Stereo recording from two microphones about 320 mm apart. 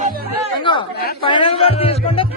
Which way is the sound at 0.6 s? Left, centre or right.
Centre.